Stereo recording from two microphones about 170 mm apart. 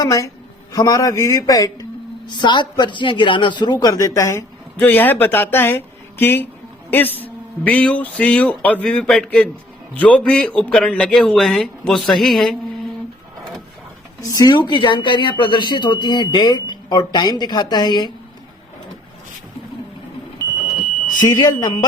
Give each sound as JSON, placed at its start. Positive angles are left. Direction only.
{"t": 0.0, "sound": "a man's voice", "side_deg": 20}
{"t": 14.2, "sound": "a man's voice", "side_deg": 20}
{"t": 21.2, "sound": "a man's voice", "side_deg": 25}